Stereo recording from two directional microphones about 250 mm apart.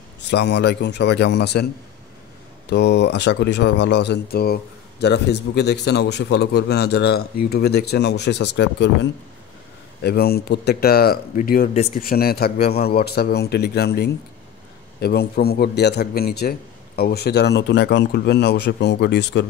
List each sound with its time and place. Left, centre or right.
0.3 s a man's voice: left
10.0 s a man's voice: left